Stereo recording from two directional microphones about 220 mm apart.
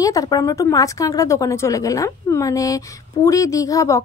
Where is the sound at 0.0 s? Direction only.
15° left (ahead or behind).